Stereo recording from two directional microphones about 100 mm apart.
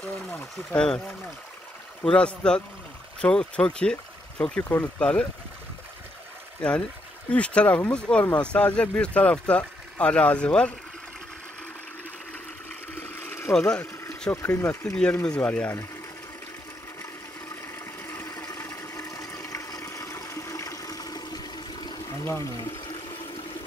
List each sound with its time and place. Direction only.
0.0 s speech: 15° left (ahead or behind)
6.6 s speech: 10° left (ahead or behind)
12.9 s a sound: 20° left (ahead or behind)
13.5 s speech: 10° left (ahead or behind)
14.3 s speech: 25° left (ahead or behind)
18.2 s a sound: 35° left (ahead or behind)
22.2 s speech: 25° left (ahead or behind)